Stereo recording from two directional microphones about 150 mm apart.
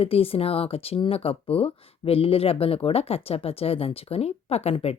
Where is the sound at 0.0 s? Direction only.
40° left (ahead or behind).